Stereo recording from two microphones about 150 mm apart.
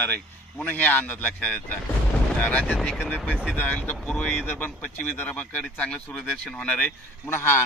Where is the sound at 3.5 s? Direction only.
10° left (ahead or behind).